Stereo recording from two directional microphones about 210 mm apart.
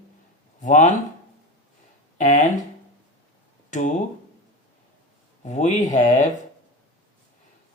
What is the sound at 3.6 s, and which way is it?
Speech, 35° left (ahead or behind).